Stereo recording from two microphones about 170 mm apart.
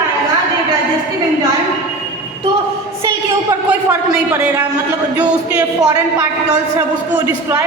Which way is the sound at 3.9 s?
5° right (ahead or behind).